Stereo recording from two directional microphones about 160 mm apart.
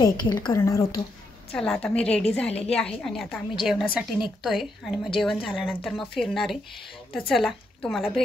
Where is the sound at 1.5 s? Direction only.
5° left (ahead or behind).